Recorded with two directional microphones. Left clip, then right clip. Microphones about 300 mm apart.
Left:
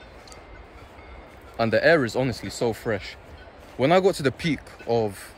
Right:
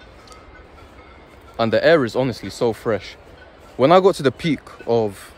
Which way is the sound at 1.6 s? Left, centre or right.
Centre.